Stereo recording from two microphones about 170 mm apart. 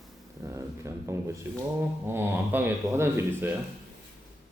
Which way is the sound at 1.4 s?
10° right (ahead or behind).